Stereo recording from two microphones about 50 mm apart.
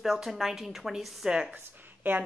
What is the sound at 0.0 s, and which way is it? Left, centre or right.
Speech, centre.